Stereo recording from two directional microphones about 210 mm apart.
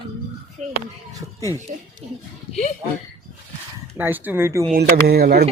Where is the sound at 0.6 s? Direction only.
35° right (ahead or behind).